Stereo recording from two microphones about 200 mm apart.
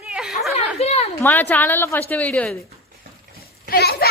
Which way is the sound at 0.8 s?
30° left (ahead or behind).